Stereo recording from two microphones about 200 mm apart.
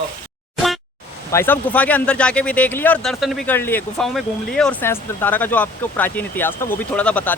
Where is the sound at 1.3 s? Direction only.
10° left (ahead or behind).